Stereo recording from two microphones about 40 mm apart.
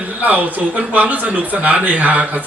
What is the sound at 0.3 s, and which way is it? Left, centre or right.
A man's voice, right.